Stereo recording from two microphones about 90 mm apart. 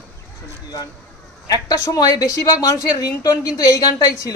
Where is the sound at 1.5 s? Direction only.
45° left (ahead or behind).